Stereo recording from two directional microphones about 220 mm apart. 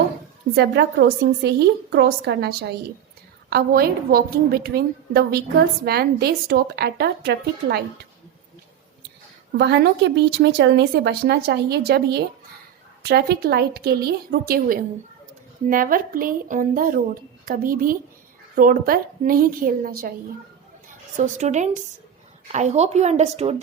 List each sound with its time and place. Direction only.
0.5 s speech: 50° right (ahead or behind)
9.6 s a woman's voice: 50° right (ahead or behind)
21.3 s a woman's voice: 30° right (ahead or behind)